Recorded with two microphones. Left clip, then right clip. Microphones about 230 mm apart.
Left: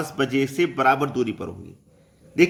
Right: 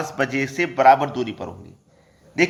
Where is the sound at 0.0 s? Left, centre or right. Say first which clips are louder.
Even; centre.